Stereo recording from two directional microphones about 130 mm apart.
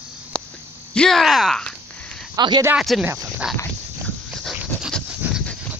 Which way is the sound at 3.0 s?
20° right (ahead or behind).